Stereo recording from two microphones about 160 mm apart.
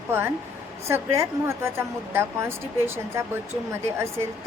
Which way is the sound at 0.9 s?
15° right (ahead or behind).